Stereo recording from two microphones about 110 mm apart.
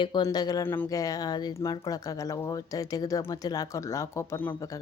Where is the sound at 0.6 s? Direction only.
20° left (ahead or behind).